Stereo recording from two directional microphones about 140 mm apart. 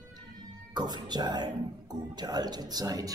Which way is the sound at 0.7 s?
30° right (ahead or behind).